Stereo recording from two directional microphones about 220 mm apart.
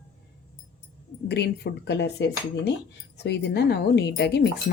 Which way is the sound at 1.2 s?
50° left (ahead or behind).